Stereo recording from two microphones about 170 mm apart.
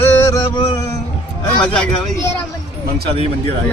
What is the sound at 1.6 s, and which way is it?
Speech, 5° left (ahead or behind).